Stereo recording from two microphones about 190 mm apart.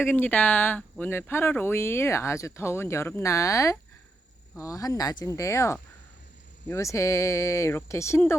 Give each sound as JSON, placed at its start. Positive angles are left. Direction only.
{"t": 0.0, "sound": "speech", "side_deg": 10}